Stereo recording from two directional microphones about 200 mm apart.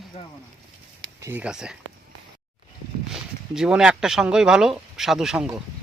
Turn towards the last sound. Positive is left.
turn(degrees=-5)  # may be behind; listen again after turning